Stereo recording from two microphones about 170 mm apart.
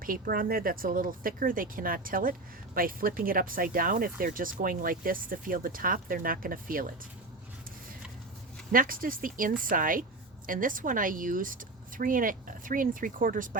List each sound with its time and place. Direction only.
0.0 s speech: 55° right (ahead or behind)
8.7 s a woman's voice: 55° right (ahead or behind)